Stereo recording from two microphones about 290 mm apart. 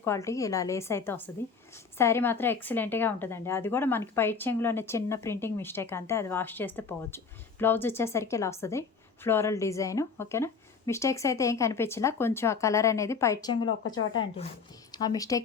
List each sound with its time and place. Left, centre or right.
0.0 s a woman's voice: centre
13.7 s speech: left
14.1 s a woman's voice: centre